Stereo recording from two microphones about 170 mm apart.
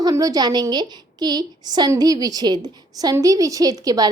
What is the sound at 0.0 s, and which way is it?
A woman's voice, 20° right (ahead or behind).